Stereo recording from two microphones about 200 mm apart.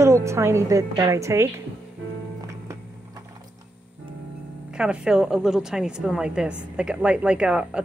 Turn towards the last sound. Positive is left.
turn(degrees=-5)  # may be behind; listen again after turning